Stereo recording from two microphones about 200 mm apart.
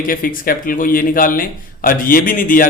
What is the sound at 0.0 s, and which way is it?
A man's voice, 45° left (ahead or behind).